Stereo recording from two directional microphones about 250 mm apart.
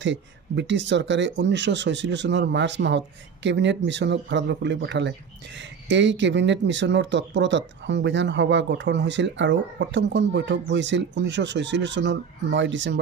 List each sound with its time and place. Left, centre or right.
0.0 s speech: right